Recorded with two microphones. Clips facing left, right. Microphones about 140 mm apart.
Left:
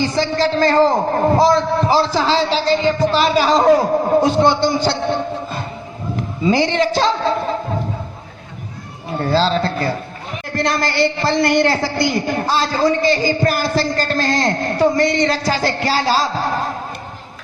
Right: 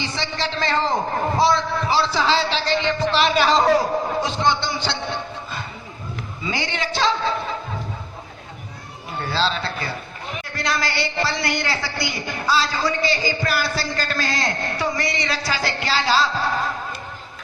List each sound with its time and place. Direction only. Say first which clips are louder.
0.0 s a man's voice: left 10 dB; 45° left (ahead or behind)
6.1 s a woman's voice: left 12 dB; 40° left (ahead or behind)
9.1 s a woman's voice: left 7 dB; 40° left (ahead or behind)